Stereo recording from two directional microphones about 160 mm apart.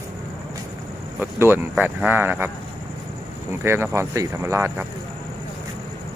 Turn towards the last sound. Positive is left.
turn(degrees=-15)  # may be behind; listen again after turning